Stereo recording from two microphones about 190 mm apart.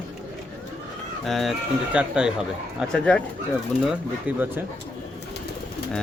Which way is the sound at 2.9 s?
5° left (ahead or behind).